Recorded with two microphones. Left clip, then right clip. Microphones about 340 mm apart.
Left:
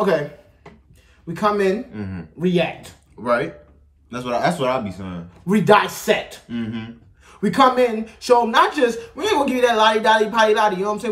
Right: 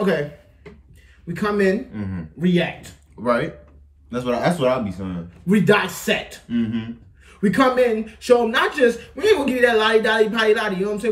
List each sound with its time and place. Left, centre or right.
1.2 s speech: centre
1.9 s speech: centre
2.4 s speech: centre
3.2 s speech: centre
5.5 s speech: centre
6.5 s speech: centre
7.2 s speech: centre